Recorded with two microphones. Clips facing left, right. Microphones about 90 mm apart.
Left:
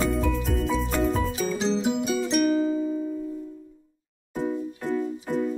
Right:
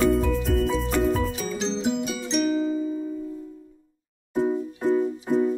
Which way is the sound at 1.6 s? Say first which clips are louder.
Even; 5° left (ahead or behind).